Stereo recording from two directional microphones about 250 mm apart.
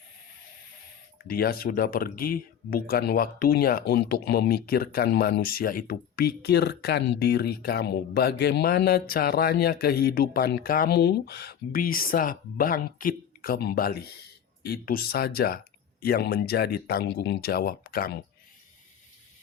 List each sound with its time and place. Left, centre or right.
1.3 s speech: left